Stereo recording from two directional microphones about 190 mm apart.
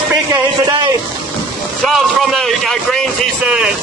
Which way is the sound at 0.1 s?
15° right (ahead or behind).